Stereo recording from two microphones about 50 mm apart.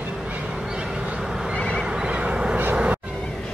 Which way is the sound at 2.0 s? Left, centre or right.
Right.